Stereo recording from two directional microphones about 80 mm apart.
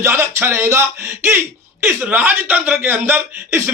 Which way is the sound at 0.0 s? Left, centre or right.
Right.